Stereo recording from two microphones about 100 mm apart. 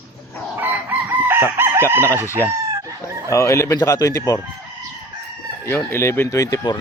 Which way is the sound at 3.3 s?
30° left (ahead or behind).